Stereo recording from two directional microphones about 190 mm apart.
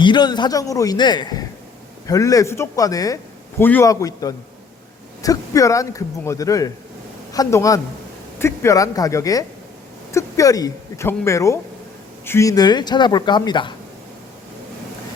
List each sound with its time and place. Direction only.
0.0 s speech: 25° left (ahead or behind)